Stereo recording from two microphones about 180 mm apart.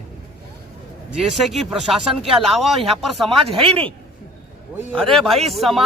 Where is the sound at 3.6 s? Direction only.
30° right (ahead or behind).